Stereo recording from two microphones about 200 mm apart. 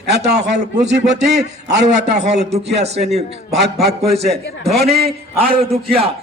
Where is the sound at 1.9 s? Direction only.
60° right (ahead or behind).